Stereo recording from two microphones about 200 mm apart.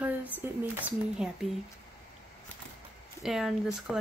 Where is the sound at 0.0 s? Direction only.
10° right (ahead or behind).